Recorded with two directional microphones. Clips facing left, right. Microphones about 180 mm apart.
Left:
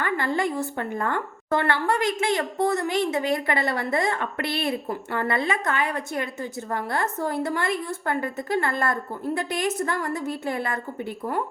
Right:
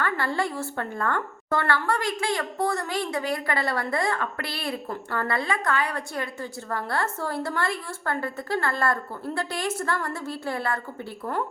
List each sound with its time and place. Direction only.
0.0 s a woman's voice: 20° left (ahead or behind)